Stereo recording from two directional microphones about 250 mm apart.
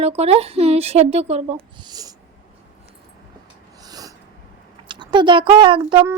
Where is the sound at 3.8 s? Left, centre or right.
Centre.